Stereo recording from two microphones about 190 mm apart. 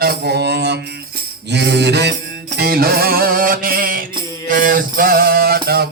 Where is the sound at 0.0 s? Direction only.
55° right (ahead or behind).